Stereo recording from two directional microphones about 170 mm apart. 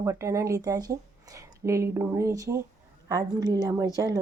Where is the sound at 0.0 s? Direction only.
15° right (ahead or behind).